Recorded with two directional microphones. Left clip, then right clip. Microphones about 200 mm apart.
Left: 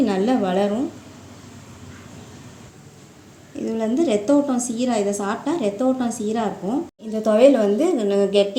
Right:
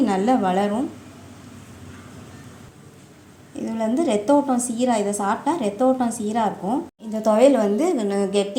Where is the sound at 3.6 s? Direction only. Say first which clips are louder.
Left 1 dB; 15° right (ahead or behind).